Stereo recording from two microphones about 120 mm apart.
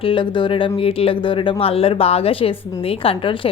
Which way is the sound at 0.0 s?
45° left (ahead or behind).